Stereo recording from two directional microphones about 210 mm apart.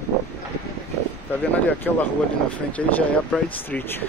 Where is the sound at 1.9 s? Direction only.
5° left (ahead or behind).